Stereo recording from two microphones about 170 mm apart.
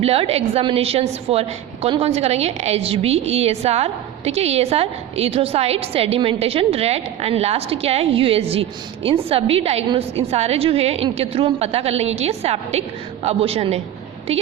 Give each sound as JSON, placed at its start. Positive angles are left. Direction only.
{"t": 0.0, "sound": "a woman's voice", "side_deg": -35}